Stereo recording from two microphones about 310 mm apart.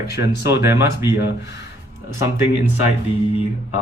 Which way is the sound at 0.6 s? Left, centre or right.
Centre.